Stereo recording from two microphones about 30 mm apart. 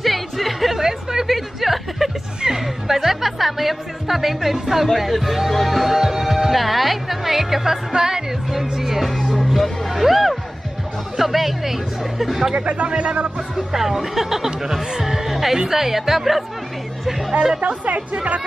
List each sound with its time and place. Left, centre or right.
0.0 s music: centre
0.7 s a sound: centre
1.2 s a sound: centre
2.4 s music: centre
4.9 s speech: centre
6.5 s speech: centre
7.9 s music: right
8.7 s speech: centre
9.6 s music: centre
11.1 s speech: centre
12.5 s speech: right
13.6 s speech: centre